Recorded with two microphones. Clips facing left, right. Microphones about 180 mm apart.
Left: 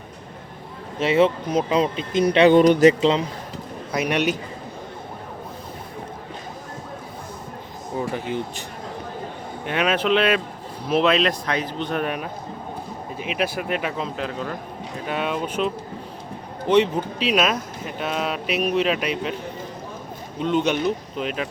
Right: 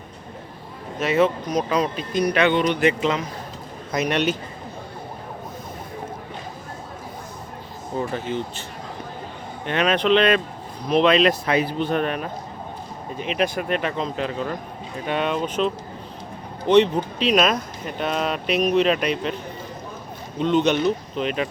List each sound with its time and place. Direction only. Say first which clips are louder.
0.9 s speech: left 1 dB; 25° left (ahead or behind)
2.5 s a man's voice: left 6 dB; 40° left (ahead or behind)
3.0 s speech: left 4 dB; 30° left (ahead or behind)
3.9 s speech: even; 10° left (ahead or behind)
7.9 s speech: even; 15° left (ahead or behind)
9.6 s speech: right 2 dB; 10° left (ahead or behind)
11.9 s speech: right 2 dB; 5° left (ahead or behind)
20.4 s speech: right 2 dB; 10° left (ahead or behind)